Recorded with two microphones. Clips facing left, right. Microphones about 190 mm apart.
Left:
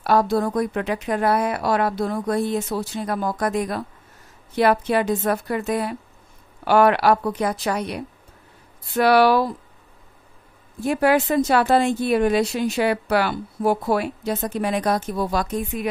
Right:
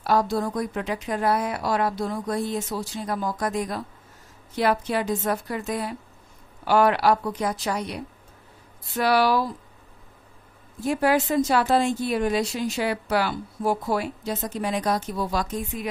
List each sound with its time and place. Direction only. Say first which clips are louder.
0.0 s speech: left 4 dB; 60° left (ahead or behind)
10.8 s speech: left 3 dB; 65° left (ahead or behind)